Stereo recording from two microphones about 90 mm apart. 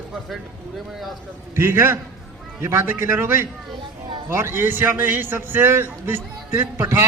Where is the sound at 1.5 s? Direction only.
30° right (ahead or behind).